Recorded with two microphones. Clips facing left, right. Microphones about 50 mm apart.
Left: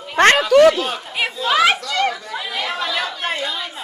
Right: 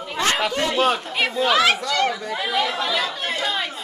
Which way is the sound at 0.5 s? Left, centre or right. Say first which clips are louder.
Left 13 dB; left.